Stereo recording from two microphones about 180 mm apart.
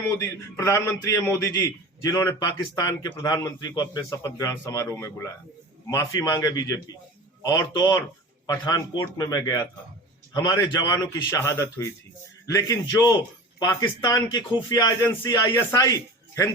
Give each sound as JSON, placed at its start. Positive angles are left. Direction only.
{"t": 0.2, "sound": "a man's voice", "side_deg": 15}